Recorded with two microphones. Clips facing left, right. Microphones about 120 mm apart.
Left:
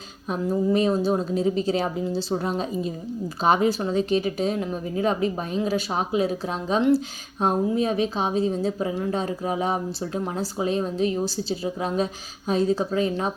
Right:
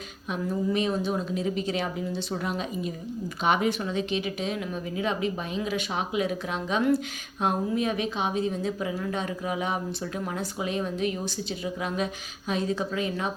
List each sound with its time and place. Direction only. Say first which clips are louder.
0.3 s a woman's voice: left 5 dB; 35° left (ahead or behind)